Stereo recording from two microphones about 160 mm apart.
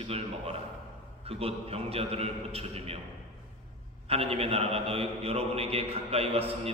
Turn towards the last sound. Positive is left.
turn(degrees=-40)  # may be behind; listen again after turning